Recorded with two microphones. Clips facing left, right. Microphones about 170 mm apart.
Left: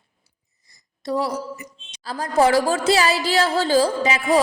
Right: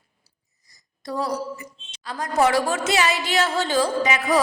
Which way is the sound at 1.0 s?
25° left (ahead or behind).